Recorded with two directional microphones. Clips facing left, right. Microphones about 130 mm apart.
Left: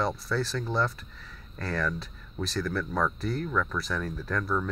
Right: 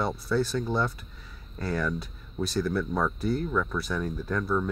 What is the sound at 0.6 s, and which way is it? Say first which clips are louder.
Speech: right 1 dB; 10° right (ahead or behind).